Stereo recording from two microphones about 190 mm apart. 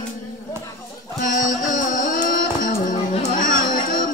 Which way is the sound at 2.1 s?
45° left (ahead or behind).